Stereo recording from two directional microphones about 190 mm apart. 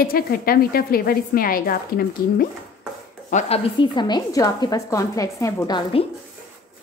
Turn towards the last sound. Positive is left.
turn(degrees=20)  # may be behind; listen again after turning